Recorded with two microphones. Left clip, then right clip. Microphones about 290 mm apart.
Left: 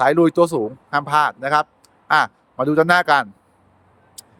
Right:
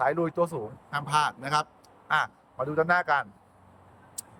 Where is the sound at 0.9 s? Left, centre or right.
Centre.